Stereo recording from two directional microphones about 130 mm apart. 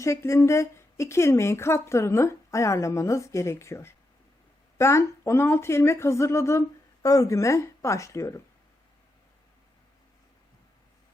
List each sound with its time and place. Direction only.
0.0 s a woman's voice: 20° left (ahead or behind)